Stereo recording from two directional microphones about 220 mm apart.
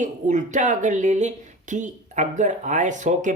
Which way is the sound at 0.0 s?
35° right (ahead or behind).